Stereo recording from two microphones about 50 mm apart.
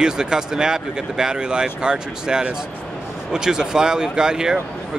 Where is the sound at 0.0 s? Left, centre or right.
Centre.